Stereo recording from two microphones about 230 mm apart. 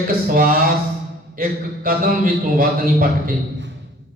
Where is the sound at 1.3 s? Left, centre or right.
Right.